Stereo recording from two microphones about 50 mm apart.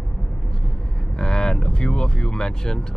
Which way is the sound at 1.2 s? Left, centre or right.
Centre.